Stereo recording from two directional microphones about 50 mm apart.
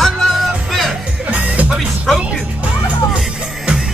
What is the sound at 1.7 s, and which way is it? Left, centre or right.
Music, centre.